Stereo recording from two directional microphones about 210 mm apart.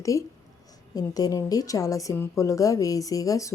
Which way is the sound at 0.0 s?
15° left (ahead or behind).